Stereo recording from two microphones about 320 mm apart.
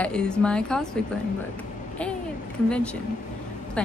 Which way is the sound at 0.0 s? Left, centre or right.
Centre.